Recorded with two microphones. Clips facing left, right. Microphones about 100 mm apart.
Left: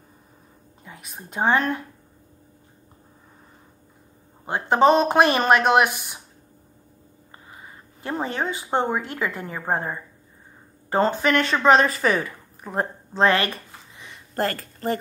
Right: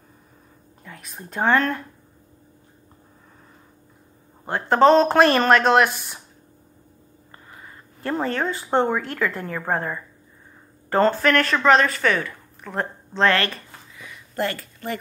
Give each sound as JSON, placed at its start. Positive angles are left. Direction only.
{"t": 0.8, "sound": "speech", "side_deg": 10}
{"t": 4.5, "sound": "speech", "side_deg": 10}
{"t": 7.5, "sound": "a woman's voice", "side_deg": 10}
{"t": 13.1, "sound": "a sound", "side_deg": 10}
{"t": 14.3, "sound": "speech", "side_deg": 40}